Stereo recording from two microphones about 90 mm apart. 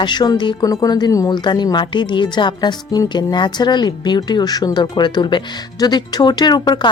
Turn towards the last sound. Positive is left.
turn(degrees=50)  # may be behind; listen again after turning